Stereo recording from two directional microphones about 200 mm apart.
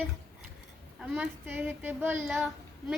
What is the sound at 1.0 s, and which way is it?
Speech, 5° right (ahead or behind).